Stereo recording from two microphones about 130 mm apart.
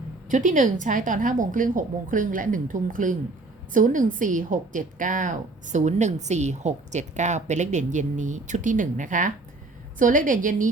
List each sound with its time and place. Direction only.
0.3 s a woman's voice: 75° right (ahead or behind)